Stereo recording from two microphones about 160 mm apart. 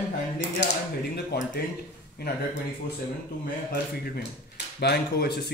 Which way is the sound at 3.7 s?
85° left.